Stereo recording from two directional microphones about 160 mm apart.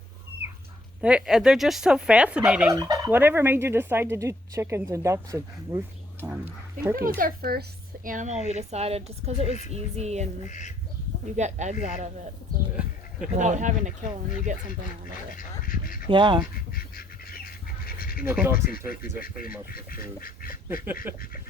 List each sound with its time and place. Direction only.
1.0 s speech: 5° right (ahead or behind)
2.7 s turkey: 20° right (ahead or behind)
6.9 s speech: 65° right (ahead or behind)
8.0 s speech: 50° right (ahead or behind)
10.4 s speech: 50° left (ahead or behind)
11.3 s speech: 45° right (ahead or behind)
13.3 s speech: 50° right (ahead or behind)
15.4 s speech: 60° left (ahead or behind)
16.0 s speech: 30° right (ahead or behind)
16.7 s duck: 65° left (ahead or behind)
17.8 s a sound: 65° left (ahead or behind)
18.3 s turkey: 10° right (ahead or behind)
18.9 s speech: 65° left (ahead or behind)
21.1 s turkey: 10° right (ahead or behind)